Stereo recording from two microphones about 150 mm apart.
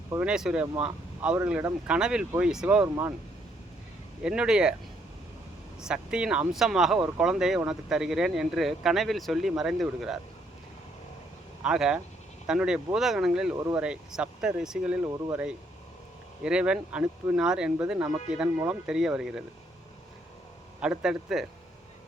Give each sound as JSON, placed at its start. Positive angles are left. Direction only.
{"t": 0.1, "sound": "speech", "side_deg": -10}
{"t": 4.2, "sound": "speech", "side_deg": -5}
{"t": 5.8, "sound": "speech", "side_deg": -5}
{"t": 11.6, "sound": "speech", "side_deg": -5}
{"t": 15.0, "sound": "speech", "side_deg": -15}
{"t": 16.4, "sound": "speech", "side_deg": -5}
{"t": 20.8, "sound": "speech", "side_deg": -5}